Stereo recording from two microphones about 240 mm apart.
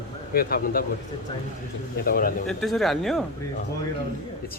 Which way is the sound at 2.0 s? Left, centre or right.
Left.